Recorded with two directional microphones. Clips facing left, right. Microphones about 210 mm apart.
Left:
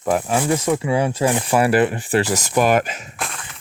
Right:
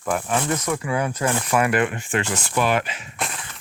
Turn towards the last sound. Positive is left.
turn(degrees=0)  # may be behind; listen again after turning